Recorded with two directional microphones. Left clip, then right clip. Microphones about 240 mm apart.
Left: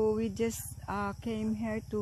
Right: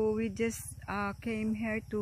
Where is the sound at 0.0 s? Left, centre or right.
Centre.